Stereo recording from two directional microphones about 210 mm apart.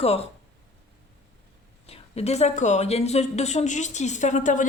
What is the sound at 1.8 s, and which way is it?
Speech, 30° left (ahead or behind).